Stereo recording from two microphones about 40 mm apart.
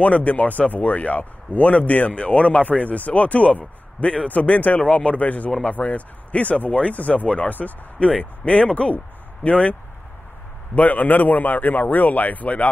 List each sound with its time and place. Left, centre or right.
0.0 s speech: left
4.3 s a man's voice: left